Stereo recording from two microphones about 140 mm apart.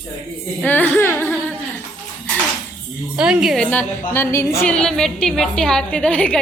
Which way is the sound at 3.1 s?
5° right (ahead or behind).